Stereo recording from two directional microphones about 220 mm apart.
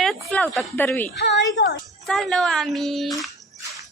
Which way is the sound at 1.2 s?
55° left (ahead or behind).